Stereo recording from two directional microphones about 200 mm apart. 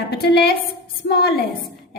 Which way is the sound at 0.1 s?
55° left (ahead or behind).